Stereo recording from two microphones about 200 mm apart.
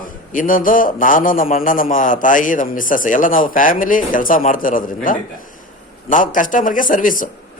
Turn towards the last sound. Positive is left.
turn(degrees=40)  # may be behind; listen again after turning